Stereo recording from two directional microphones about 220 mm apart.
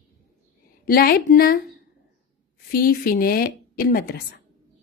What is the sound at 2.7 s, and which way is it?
A woman's voice, 40° left (ahead or behind).